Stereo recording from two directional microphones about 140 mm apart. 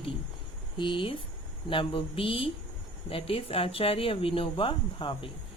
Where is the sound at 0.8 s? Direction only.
35° left (ahead or behind).